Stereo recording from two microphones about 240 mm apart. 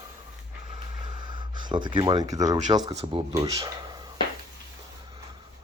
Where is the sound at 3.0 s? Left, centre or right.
Centre.